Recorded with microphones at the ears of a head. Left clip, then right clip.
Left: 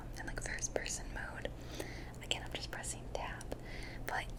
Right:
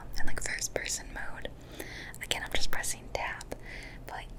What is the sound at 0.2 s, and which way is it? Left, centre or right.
Whispering, right.